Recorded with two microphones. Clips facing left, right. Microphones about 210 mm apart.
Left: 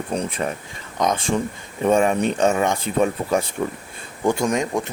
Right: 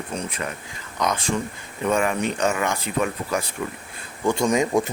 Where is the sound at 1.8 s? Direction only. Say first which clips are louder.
Left 4 dB; 25° left (ahead or behind).